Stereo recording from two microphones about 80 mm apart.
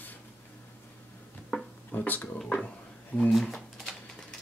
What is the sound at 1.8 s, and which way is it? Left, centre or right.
Speech, left.